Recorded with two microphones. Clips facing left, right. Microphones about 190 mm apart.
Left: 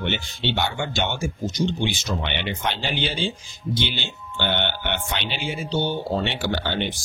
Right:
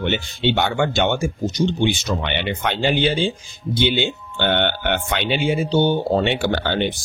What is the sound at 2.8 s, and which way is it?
Speech, 55° right (ahead or behind).